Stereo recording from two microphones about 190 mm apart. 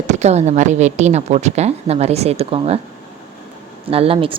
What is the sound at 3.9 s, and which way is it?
Speech, 30° right (ahead or behind).